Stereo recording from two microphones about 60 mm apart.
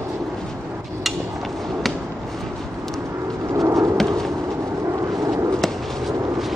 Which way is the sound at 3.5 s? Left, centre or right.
Right.